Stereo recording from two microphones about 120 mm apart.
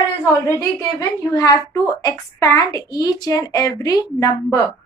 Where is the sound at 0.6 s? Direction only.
30° left (ahead or behind).